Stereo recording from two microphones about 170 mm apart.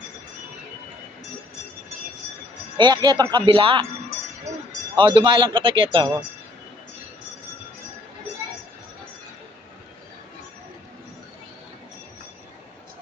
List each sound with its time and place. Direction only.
2.7 s speech: 25° right (ahead or behind)
4.9 s speech: 30° right (ahead or behind)